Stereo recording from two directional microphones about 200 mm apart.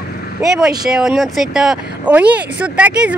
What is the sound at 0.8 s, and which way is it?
Speech, centre (ahead or behind).